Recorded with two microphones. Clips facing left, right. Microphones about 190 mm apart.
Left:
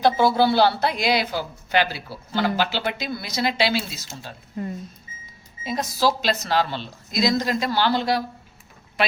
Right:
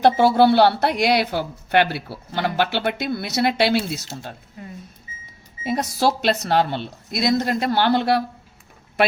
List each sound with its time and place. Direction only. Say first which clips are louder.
0.0 s speech: right 3 dB; 65° right (ahead or behind)
5.6 s speech: right 2 dB; 60° right (ahead or behind)